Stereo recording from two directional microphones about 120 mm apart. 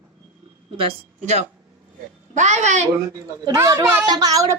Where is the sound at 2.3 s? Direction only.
80° right.